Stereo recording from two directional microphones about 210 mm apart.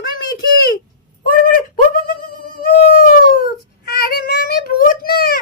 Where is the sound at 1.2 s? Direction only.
45° left (ahead or behind).